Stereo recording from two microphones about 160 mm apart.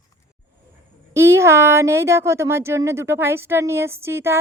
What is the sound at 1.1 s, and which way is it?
Speech, 15° right (ahead or behind).